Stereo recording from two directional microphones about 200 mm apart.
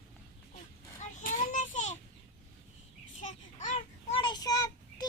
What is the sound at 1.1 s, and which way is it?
Child singing, 40° left (ahead or behind).